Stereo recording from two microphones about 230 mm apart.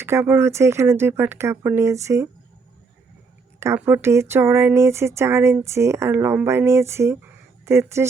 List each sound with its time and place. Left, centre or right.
0.0 s speech: centre
3.6 s speech: centre